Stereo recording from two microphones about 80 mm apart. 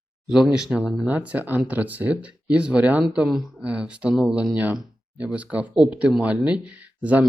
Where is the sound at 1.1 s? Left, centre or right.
Centre.